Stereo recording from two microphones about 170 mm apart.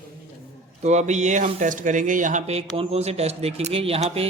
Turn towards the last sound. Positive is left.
turn(degrees=-35)  # may be behind; listen again after turning